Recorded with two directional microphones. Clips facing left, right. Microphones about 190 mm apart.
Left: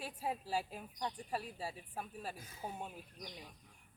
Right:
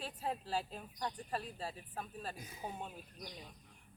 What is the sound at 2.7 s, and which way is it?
Speech, 10° left (ahead or behind).